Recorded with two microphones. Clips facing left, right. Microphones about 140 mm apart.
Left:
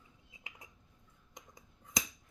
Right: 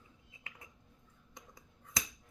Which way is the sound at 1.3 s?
20° left (ahead or behind).